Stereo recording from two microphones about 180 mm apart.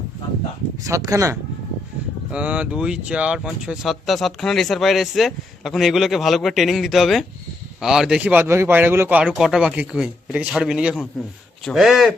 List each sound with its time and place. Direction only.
0.9 s speech: 20° right (ahead or behind)
2.3 s speech: 5° right (ahead or behind)